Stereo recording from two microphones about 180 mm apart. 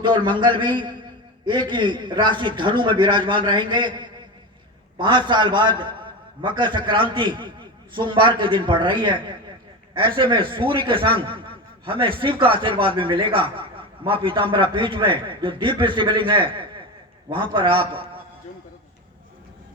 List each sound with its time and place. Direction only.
0.0 s a man's voice: 25° right (ahead or behind)